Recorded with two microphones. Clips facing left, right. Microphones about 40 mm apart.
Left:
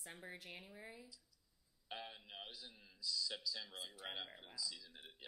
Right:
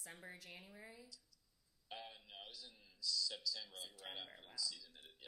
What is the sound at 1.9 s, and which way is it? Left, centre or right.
A man's voice, centre.